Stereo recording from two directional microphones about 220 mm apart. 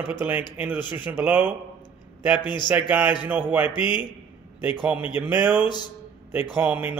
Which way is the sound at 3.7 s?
20° left (ahead or behind).